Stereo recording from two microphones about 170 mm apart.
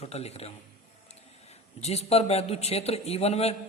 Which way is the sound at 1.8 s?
40° left (ahead or behind).